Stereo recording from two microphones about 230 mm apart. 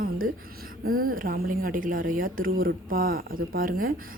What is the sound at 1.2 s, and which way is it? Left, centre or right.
Speech, right.